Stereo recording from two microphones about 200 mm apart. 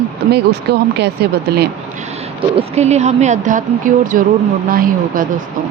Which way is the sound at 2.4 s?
30° right (ahead or behind).